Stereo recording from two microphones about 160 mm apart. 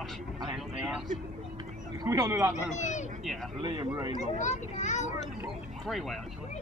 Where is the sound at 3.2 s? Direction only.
Centre (ahead or behind).